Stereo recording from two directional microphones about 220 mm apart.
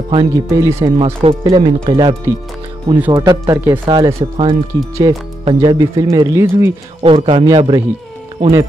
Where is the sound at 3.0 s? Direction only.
15° right (ahead or behind).